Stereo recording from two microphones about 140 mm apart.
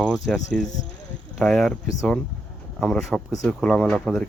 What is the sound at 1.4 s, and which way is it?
Speech, 5° left (ahead or behind).